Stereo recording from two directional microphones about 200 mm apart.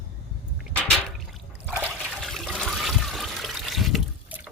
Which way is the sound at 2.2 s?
Centre (ahead or behind).